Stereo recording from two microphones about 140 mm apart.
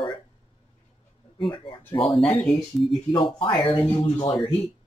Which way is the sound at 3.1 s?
35° left (ahead or behind).